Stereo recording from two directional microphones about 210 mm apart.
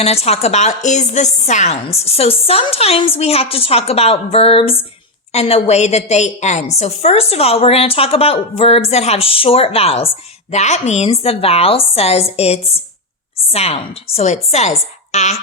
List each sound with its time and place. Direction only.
0.0 s a woman's voice: 30° left (ahead or behind)